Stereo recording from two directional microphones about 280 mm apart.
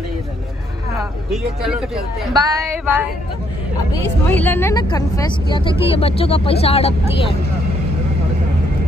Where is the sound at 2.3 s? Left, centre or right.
Centre.